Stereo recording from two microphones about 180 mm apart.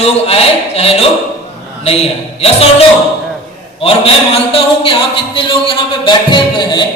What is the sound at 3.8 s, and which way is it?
Speech, 30° left (ahead or behind).